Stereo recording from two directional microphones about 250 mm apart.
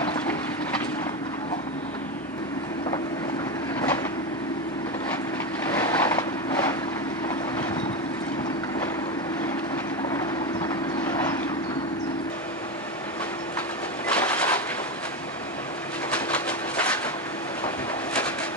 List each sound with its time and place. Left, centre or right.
5.8 s vehicle: centre
10.7 s clip-clop: centre
14.1 s a sound: centre
16.1 s train: centre